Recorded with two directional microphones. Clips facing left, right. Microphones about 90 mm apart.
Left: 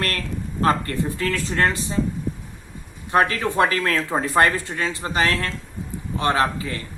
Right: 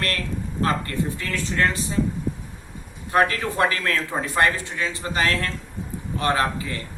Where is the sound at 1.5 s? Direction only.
35° left (ahead or behind).